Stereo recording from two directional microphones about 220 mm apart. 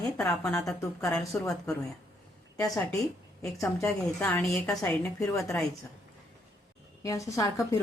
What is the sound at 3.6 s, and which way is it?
Speech, 10° left (ahead or behind).